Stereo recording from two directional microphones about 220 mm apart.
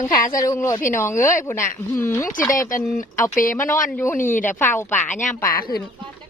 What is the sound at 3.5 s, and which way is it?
Speech, 10° left (ahead or behind).